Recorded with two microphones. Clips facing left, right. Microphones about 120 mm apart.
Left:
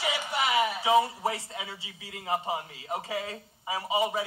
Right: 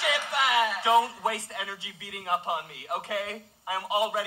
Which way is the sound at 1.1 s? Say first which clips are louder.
Right 1 dB; 70° right (ahead or behind).